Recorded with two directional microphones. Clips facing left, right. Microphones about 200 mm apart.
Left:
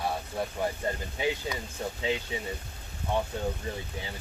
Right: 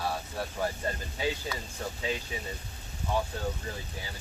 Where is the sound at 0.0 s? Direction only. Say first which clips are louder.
Left 2 dB; 20° left (ahead or behind).